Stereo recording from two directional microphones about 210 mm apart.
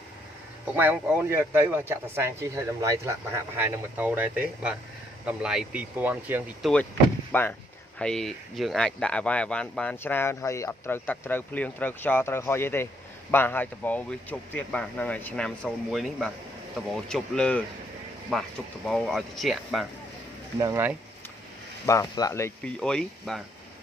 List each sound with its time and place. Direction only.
0.7 s speech: 10° right (ahead or behind)
7.3 s speech: 10° left (ahead or behind)
20.5 s speech: 20° right (ahead or behind)
21.8 s speech: 15° left (ahead or behind)